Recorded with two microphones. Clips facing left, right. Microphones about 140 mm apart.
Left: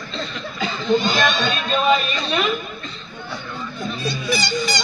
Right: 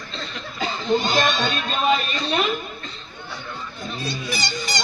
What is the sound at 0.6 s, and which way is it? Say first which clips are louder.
Speech: left 2 dB; 45° right (ahead or behind).